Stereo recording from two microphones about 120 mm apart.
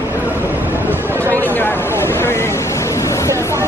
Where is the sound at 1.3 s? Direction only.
15° left (ahead or behind).